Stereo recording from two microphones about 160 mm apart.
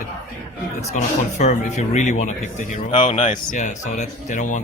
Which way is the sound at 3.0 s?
40° left (ahead or behind).